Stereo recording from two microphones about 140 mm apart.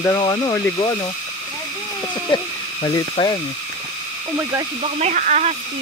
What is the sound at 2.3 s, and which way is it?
Speech, 30° left (ahead or behind).